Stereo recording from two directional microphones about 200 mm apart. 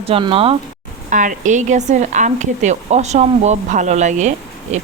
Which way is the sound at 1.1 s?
40° right (ahead or behind).